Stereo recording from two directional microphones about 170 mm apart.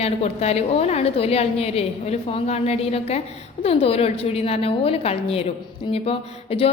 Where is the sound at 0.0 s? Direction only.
40° left (ahead or behind).